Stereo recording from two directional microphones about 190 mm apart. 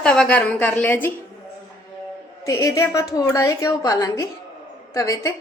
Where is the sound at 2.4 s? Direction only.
15° left (ahead or behind).